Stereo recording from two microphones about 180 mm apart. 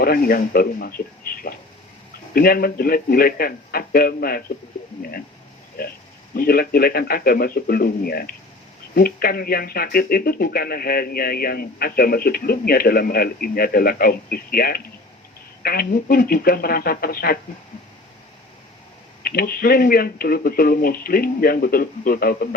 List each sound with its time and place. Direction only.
0.0 s speech: 55° left (ahead or behind)
5.8 s speech: 60° left (ahead or behind)
19.2 s speech: 55° left (ahead or behind)